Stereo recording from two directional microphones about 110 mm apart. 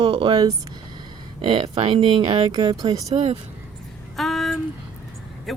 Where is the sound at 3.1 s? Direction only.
65° right (ahead or behind).